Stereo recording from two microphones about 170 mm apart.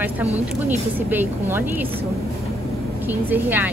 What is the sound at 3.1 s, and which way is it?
Speech, 10° right (ahead or behind).